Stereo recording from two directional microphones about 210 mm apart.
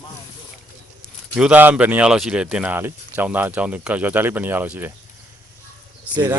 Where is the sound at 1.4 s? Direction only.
5° right (ahead or behind).